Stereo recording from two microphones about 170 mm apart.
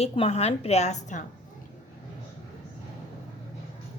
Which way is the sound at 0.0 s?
35° left (ahead or behind).